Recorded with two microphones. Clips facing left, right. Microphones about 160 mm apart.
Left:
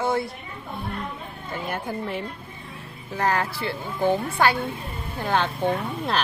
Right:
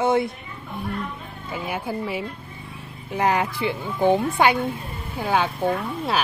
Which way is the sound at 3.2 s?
20° right (ahead or behind).